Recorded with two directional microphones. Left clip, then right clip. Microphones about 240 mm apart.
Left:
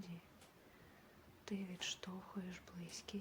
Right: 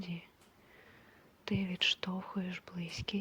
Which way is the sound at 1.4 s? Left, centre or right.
Right.